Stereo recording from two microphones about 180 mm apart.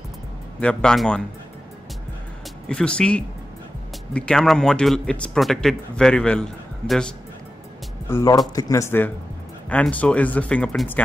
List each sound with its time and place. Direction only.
0.6 s a man's voice: 5° left (ahead or behind)
2.7 s a man's voice: 5° left (ahead or behind)
8.1 s speech: 20° left (ahead or behind)